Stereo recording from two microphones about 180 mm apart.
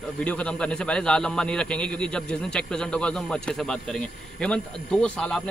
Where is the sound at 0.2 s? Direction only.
5° left (ahead or behind).